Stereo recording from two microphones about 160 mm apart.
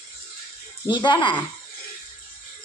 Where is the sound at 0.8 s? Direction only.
30° left (ahead or behind).